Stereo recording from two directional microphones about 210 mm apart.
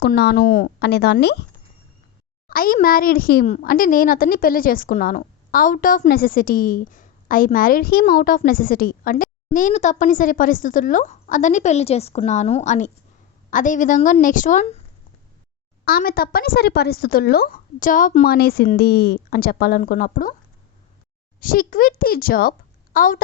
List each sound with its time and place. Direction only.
0.0 s speech: 50° left (ahead or behind)
2.5 s a child's voice: 45° left (ahead or behind)
15.8 s speech: 45° left (ahead or behind)
21.4 s a woman's voice: 40° left (ahead or behind)